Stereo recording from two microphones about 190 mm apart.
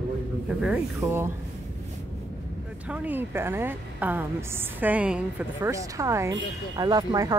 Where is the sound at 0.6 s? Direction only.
5° right (ahead or behind).